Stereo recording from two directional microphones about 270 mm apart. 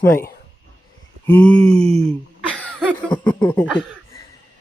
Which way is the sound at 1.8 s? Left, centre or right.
Right.